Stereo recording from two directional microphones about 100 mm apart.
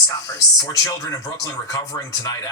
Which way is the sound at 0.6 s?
35° left (ahead or behind).